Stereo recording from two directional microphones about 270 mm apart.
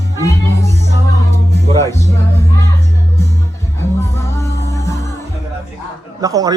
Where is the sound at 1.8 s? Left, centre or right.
Centre.